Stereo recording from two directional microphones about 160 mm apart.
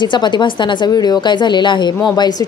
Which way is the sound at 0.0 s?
30° left (ahead or behind).